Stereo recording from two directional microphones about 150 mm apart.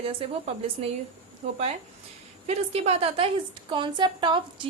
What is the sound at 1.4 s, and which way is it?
A woman's voice, 50° right (ahead or behind).